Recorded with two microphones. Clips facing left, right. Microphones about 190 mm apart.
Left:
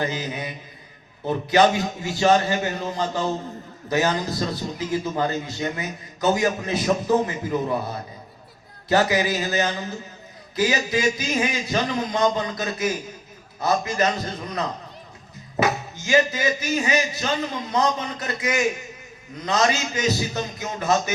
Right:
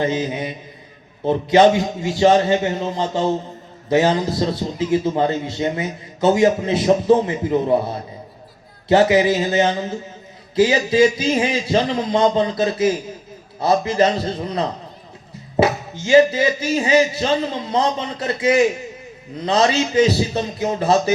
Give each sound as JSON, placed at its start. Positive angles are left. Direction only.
{"t": 0.0, "sound": "a man's voice", "side_deg": -25}